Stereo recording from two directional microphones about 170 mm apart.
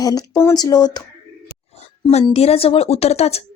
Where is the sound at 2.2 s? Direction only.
35° left (ahead or behind).